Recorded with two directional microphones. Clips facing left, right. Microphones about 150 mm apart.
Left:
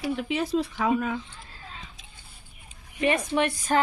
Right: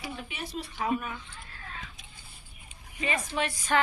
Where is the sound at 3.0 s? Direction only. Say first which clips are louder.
Left 7 dB; 60° left (ahead or behind).